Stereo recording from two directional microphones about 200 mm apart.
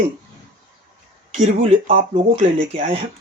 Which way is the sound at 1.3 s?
30° right (ahead or behind).